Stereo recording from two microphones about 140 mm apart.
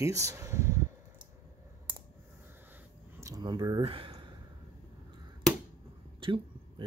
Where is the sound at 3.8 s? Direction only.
40° right (ahead or behind).